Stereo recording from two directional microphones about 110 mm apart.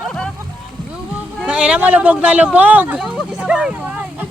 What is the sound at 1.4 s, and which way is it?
Speech, 10° right (ahead or behind).